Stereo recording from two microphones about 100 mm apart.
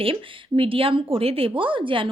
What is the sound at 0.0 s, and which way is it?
Speech, 65° right (ahead or behind).